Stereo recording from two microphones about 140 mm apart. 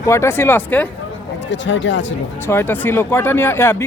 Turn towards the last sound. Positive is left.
turn(degrees=15)  # may be behind; listen again after turning